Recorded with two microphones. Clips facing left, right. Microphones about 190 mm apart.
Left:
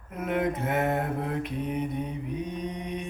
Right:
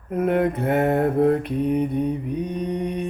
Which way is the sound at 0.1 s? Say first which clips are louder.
Right 7 dB; 55° right (ahead or behind).